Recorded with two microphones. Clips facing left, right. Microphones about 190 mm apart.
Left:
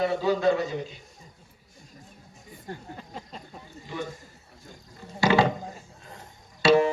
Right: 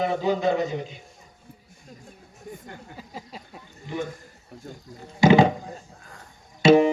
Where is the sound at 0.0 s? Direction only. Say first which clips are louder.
Even; 20° right (ahead or behind).